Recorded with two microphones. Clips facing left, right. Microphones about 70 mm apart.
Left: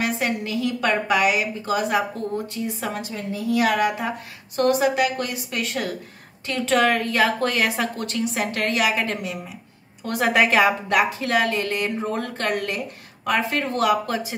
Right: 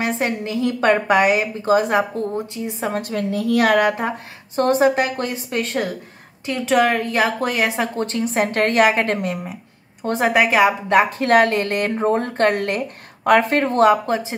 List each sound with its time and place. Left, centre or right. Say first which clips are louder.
0.0 s a woman's voice: right 2 dB; right
2.3 s speech: right 1 dB; centre
2.9 s a woman's voice: right 6 dB; right
4.6 s a woman's voice: right 3 dB; right
6.4 s a woman's voice: right 3 dB; centre; by 9.4 s right
10.0 s speech: right 3 dB; right
10.3 s speech: right 2 dB; centre
11.1 s a woman's voice: right 6 dB; right
11.9 s a woman's voice: right 7 dB; right